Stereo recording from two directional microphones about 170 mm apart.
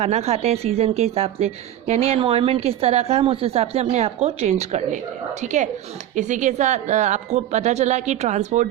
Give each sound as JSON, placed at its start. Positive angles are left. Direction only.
{"t": 0.0, "sound": "a woman's voice", "side_deg": -40}